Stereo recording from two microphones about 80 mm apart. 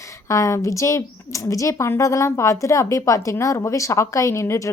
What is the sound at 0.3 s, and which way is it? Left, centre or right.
Speech, left.